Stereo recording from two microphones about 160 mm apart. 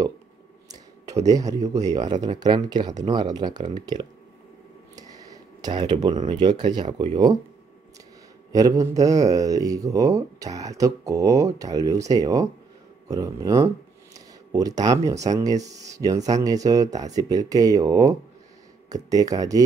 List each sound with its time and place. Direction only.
1.2 s speech: 20° right (ahead or behind)
4.9 s a sound: 25° right (ahead or behind)
6.2 s speech: 30° right (ahead or behind)
8.5 s speech: 20° right (ahead or behind)